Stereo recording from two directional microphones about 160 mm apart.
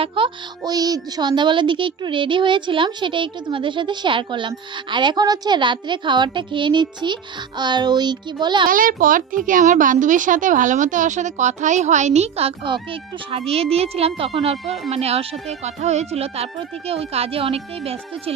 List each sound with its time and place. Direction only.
0.0 s a child's voice: 35° right (ahead or behind)
8.6 s a child's voice: 60° right (ahead or behind); by 18.3 s 40° right (ahead or behind)